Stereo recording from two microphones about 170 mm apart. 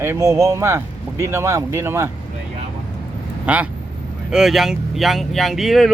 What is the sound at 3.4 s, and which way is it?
Speech, 10° right (ahead or behind).